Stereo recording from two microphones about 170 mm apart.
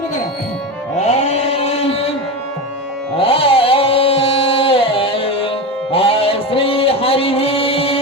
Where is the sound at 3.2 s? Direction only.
35° left (ahead or behind).